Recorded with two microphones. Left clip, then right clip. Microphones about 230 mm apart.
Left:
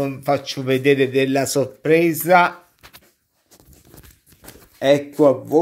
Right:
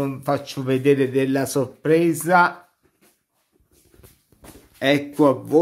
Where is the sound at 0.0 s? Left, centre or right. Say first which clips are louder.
Left 3 dB; centre.